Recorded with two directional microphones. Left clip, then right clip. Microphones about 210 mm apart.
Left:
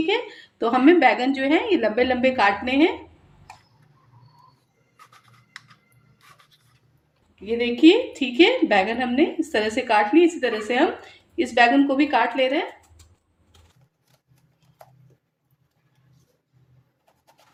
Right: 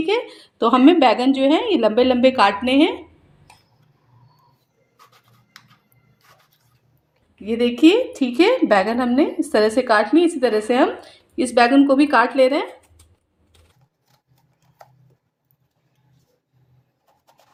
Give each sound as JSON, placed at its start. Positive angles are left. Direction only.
{"t": 0.0, "sound": "a sound", "side_deg": -35}
{"t": 0.9, "sound": "a woman's voice", "side_deg": -5}
{"t": 1.3, "sound": "a woman's voice", "side_deg": -30}
{"t": 7.4, "sound": "a woman's voice", "side_deg": -40}